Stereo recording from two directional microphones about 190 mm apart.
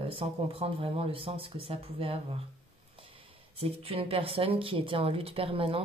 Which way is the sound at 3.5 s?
30° right (ahead or behind).